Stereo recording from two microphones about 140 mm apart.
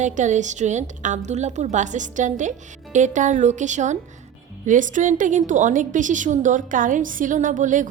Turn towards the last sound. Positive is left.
turn(degrees=-65)  # may be behind; listen again after turning